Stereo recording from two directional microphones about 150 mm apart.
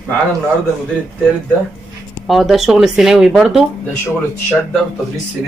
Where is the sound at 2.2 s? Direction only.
Centre (ahead or behind).